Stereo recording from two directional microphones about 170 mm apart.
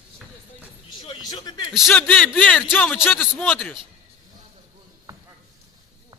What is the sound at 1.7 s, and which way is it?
A man's voice, centre (ahead or behind).